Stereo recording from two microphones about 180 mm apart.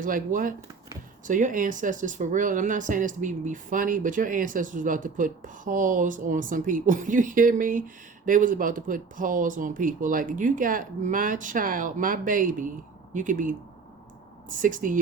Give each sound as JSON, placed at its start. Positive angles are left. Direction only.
{"t": 0.0, "sound": "speech", "side_deg": -50}
{"t": 14.6, "sound": "speech", "side_deg": -50}